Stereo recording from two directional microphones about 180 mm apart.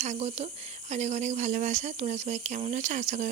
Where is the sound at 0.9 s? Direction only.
40° right (ahead or behind).